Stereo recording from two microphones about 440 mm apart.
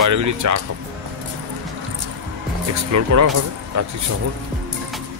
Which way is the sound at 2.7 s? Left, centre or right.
Right.